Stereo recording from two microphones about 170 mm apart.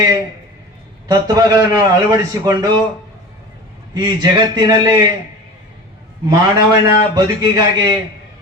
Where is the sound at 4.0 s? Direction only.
25° right (ahead or behind).